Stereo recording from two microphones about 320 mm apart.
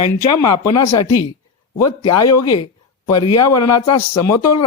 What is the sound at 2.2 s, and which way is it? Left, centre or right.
Speech, left.